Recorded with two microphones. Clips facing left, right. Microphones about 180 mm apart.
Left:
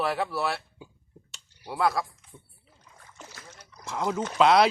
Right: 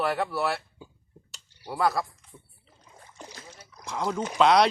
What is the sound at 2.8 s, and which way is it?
Rowboat, 25° right (ahead or behind).